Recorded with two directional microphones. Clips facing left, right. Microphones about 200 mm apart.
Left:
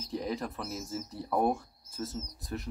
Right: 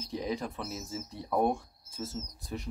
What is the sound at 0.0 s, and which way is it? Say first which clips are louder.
Speech: even; centre (ahead or behind).